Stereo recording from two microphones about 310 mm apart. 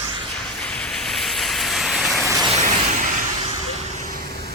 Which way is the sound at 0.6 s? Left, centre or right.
Centre.